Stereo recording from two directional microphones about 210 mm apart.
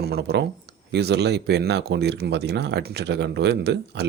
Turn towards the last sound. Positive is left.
turn(degrees=-55)  # may be behind; listen again after turning